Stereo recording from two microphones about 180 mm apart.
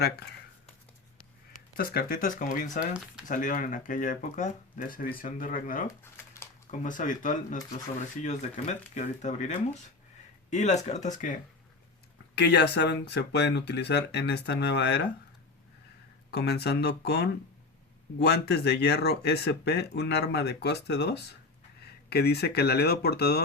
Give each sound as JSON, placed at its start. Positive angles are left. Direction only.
{"t": 1.7, "sound": "speech", "side_deg": 55}
{"t": 2.9, "sound": "speech", "side_deg": -5}
{"t": 3.2, "sound": "speech", "side_deg": 45}
{"t": 5.9, "sound": "a sound", "side_deg": 15}
{"t": 6.7, "sound": "speech", "side_deg": 45}
{"t": 12.3, "sound": "speech", "side_deg": 70}
{"t": 16.3, "sound": "speech", "side_deg": 65}